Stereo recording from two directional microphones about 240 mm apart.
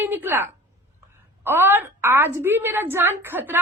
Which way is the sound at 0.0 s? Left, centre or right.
Centre.